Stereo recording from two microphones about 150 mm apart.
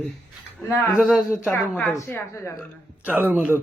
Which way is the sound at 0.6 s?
15° left (ahead or behind).